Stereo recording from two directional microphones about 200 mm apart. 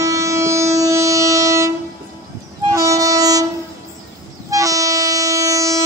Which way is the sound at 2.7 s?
15° right (ahead or behind).